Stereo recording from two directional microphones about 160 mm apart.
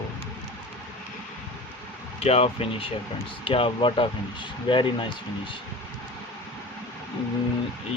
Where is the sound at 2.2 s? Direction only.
40° left (ahead or behind).